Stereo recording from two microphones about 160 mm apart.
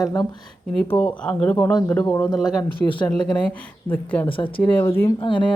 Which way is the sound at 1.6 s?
25° left (ahead or behind).